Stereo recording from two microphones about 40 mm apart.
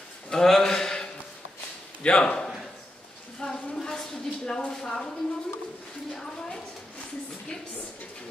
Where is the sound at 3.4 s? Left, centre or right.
Centre.